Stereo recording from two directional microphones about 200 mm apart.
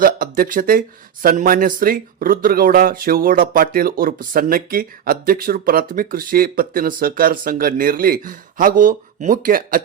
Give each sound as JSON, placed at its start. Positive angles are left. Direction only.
{"t": 0.0, "sound": "speech", "side_deg": -45}